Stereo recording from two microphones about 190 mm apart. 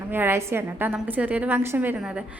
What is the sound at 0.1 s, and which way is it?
A woman's voice, 10° right (ahead or behind).